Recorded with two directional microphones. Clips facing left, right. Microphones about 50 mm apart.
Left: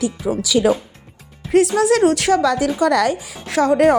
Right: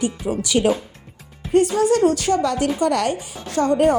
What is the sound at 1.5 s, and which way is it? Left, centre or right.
Speech, left.